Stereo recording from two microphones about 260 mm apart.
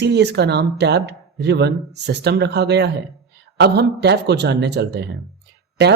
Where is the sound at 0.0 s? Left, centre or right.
Right.